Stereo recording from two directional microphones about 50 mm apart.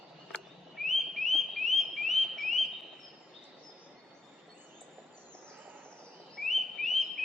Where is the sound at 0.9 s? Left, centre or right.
Centre.